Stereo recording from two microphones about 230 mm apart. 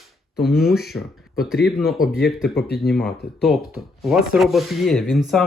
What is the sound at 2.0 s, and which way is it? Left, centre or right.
Speech, left.